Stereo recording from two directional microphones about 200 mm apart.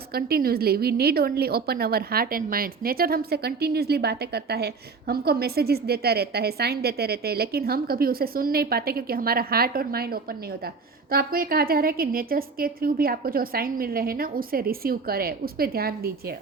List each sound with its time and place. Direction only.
0.1 s speech: 50° right (ahead or behind)